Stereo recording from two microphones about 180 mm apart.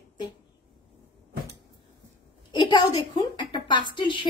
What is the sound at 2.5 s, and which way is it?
A woman's voice, 25° left (ahead or behind).